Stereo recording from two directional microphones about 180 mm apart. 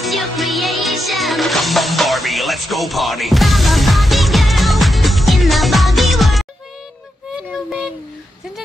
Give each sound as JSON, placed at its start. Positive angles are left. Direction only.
{"t": 0.0, "sound": "music", "side_deg": 0}